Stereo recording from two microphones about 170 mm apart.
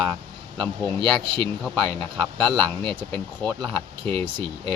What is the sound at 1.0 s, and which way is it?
Speech, 30° right (ahead or behind).